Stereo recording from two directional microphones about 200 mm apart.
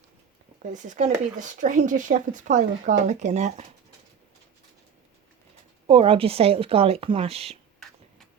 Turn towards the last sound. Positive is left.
turn(degrees=-30)  # may be behind; listen again after turning